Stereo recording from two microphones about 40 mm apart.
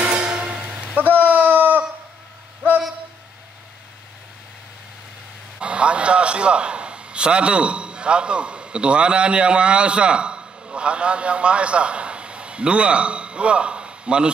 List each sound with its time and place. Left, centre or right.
0.0 s music: right
1.1 s a sound: right
5.6 s a man's voice: right